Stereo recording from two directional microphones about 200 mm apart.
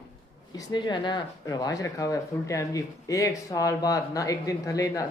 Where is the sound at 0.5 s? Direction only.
20° left (ahead or behind).